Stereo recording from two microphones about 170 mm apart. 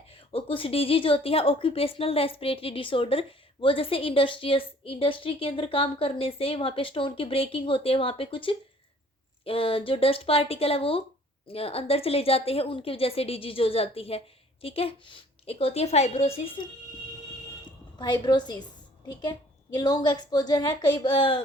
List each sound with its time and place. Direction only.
0.1 s a woman's voice: 35° left (ahead or behind)
18.0 s speech: 25° left (ahead or behind)
19.7 s speech: 25° left (ahead or behind)